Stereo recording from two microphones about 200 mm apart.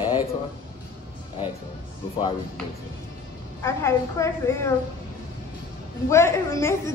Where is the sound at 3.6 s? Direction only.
15° left (ahead or behind).